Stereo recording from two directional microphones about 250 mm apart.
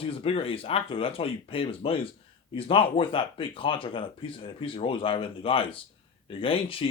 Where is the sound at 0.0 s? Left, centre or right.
Left.